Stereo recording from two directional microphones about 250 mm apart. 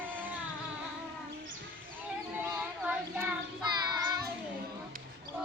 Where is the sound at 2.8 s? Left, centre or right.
Centre.